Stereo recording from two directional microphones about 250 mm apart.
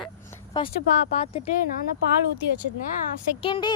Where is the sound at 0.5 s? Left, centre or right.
Centre.